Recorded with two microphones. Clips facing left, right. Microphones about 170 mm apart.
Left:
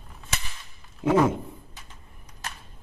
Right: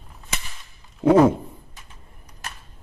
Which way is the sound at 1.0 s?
35° right (ahead or behind).